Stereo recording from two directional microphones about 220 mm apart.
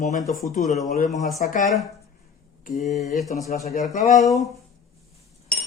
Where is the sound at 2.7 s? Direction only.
30° left (ahead or behind).